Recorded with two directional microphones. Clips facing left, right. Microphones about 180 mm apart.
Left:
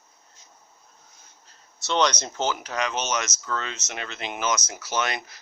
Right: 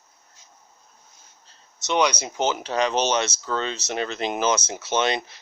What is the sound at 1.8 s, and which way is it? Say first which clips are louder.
Speech: right 1 dB; 15° right (ahead or behind).